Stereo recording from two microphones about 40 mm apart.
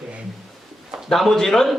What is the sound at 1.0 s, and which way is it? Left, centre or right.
Speech, centre.